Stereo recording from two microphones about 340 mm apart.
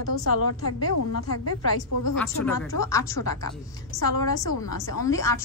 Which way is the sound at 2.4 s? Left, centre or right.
Left.